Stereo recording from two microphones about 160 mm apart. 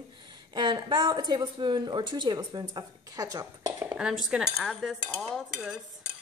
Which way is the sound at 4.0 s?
5° right (ahead or behind).